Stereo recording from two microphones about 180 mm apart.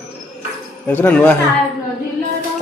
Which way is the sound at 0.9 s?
10° left (ahead or behind).